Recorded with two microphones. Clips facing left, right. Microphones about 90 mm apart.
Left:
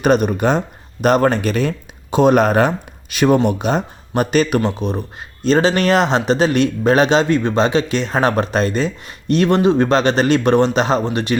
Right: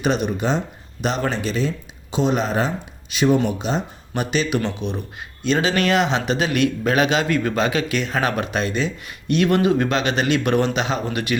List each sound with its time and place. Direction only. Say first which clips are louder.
0.0 s speech: left 6 dB; 50° left (ahead or behind); by 11.3 s 30° left (ahead or behind)